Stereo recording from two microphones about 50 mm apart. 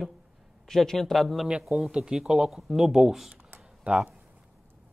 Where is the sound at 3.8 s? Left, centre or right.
Right.